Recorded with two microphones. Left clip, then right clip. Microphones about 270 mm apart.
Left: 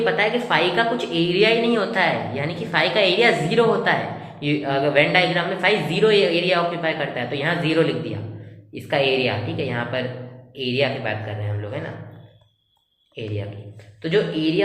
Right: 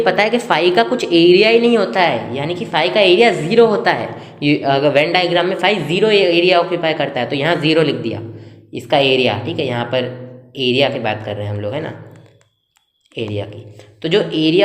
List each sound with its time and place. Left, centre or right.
0.0 s a woman's voice: right
13.2 s a woman's voice: right